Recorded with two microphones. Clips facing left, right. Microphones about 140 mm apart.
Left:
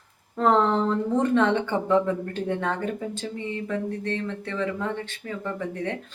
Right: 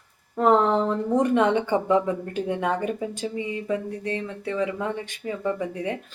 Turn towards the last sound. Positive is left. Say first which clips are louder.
# right 3 dB
turn(degrees=-10)  # may be behind; listen again after turning